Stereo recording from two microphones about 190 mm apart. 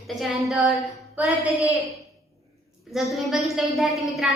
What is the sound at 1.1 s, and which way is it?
Speech, 5° right (ahead or behind).